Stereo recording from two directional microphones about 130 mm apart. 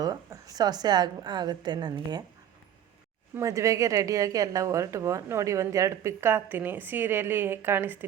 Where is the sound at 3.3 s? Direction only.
25° right (ahead or behind).